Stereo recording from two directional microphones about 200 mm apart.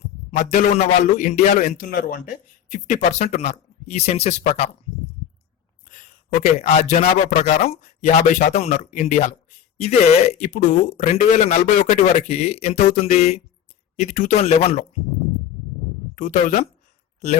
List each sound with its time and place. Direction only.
0.4 s speech: 40° left (ahead or behind)
5.9 s speech: 40° left (ahead or behind)
16.1 s speech: 40° left (ahead or behind)